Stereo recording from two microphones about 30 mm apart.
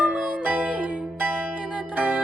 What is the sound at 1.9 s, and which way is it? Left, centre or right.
Music, right.